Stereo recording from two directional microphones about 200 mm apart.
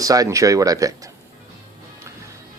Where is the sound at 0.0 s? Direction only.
15° right (ahead or behind).